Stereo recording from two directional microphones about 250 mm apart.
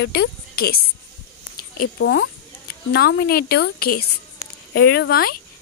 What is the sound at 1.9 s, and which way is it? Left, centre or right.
A woman's voice, left.